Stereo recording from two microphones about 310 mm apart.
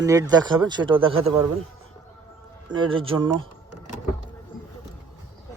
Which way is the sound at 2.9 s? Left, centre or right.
Centre.